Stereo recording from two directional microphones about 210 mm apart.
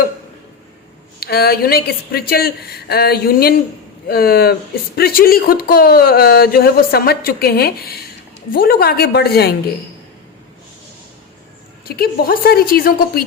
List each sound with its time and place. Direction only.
1.2 s speech: 50° left (ahead or behind)
11.9 s speech: 45° left (ahead or behind)